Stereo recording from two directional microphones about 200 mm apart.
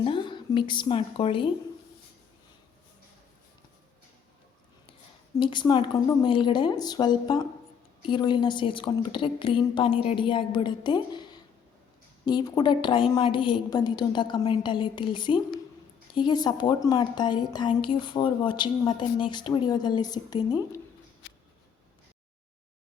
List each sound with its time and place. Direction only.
0.0 s a woman's voice: 25° left (ahead or behind)
5.4 s a woman's voice: 25° left (ahead or behind)